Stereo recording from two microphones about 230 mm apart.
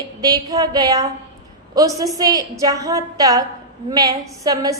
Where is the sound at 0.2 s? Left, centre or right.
Centre.